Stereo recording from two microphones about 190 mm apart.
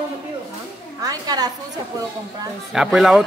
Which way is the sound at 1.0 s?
20° right (ahead or behind).